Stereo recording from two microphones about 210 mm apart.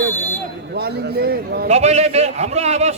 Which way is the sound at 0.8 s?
50° right (ahead or behind).